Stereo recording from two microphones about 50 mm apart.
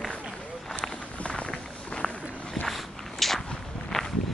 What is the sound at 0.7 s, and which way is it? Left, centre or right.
Run, left.